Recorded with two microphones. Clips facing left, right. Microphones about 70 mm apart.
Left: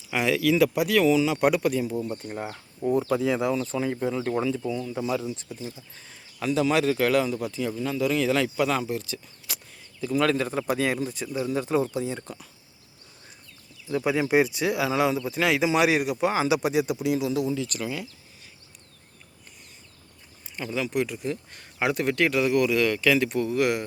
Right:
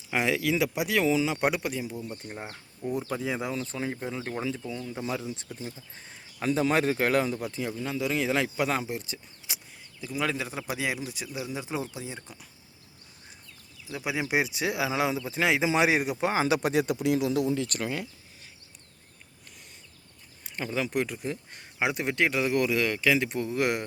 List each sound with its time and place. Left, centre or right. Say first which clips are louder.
0.1 s speech: left 4 dB; right; by 3.2 s centre
3.2 s speech: left 7 dB; centre
5.5 s a man's voice: left 2 dB; right
6.0 s speech: left 1 dB; right
10.0 s speech: left 7 dB; centre
13.8 s a man's voice: left 7 dB; centre; by 18.1 s right
20.7 s speech: left 2 dB; right